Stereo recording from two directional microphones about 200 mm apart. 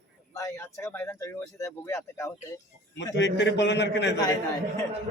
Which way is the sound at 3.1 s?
60° left (ahead or behind).